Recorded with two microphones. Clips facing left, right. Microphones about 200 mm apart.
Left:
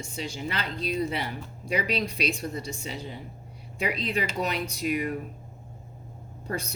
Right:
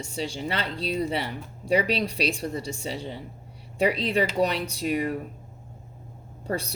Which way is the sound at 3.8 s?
35° right (ahead or behind).